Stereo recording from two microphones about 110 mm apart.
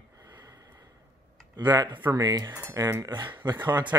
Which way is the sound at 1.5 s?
40° right (ahead or behind).